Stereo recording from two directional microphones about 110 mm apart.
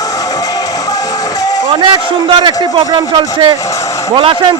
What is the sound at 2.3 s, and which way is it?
A man's voice, 50° right (ahead or behind).